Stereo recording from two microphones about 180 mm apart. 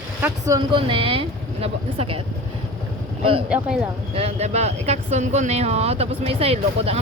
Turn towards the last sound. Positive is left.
turn(degrees=-35)  # may be behind; listen again after turning